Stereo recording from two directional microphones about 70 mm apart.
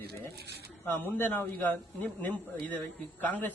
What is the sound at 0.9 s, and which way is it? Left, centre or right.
A man's voice, left.